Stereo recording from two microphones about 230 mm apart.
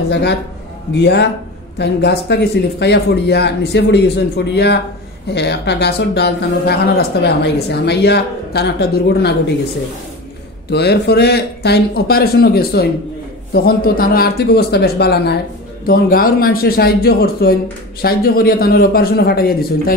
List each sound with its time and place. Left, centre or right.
0.1 s speech: left
10.7 s a man's voice: left